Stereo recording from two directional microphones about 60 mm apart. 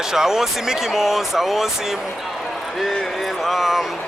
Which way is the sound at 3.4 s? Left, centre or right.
Centre.